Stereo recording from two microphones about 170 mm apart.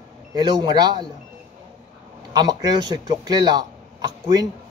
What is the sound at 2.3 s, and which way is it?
Speech, 25° right (ahead or behind).